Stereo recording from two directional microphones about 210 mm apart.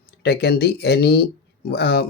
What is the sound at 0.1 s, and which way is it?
Speech, 50° left (ahead or behind).